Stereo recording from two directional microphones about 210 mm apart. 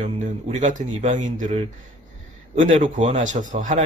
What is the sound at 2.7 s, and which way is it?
A man's voice, 35° right (ahead or behind).